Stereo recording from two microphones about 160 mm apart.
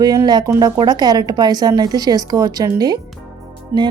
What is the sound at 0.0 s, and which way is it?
Speech, 25° right (ahead or behind).